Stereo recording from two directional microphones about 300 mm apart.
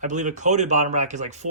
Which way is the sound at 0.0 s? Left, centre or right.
Right.